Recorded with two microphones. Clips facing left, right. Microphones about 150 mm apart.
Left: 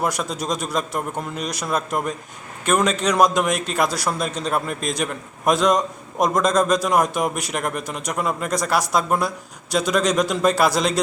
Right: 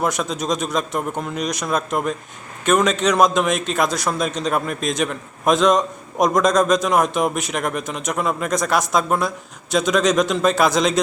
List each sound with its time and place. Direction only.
0.0 s a man's voice: 5° left (ahead or behind)